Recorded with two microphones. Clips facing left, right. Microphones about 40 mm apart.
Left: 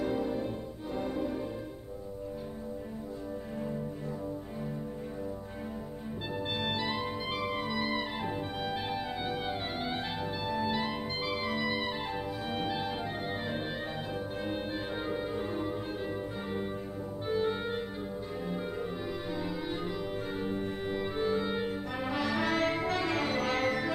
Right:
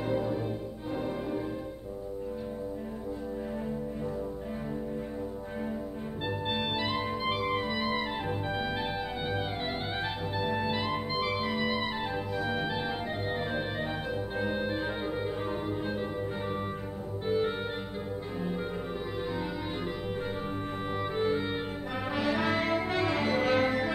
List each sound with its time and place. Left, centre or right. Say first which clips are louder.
0.1 s music: right 2 dB; centre
6.5 s organ: right 1 dB; centre
6.8 s music: right 3 dB; right
10.5 s music: left 1 dB; right
12.4 s music: even; centre
14.4 s organ: right 5 dB; right
17.3 s music: right 2 dB; centre
21.2 s music: right 1 dB; right